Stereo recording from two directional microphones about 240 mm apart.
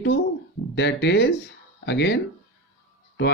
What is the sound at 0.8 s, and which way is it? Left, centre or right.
Speech, left.